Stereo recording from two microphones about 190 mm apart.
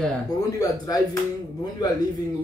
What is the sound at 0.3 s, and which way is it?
A man's voice, 20° left (ahead or behind).